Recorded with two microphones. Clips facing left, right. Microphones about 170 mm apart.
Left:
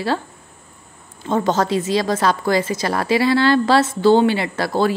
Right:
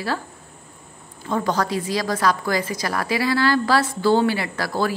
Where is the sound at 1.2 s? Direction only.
25° left (ahead or behind).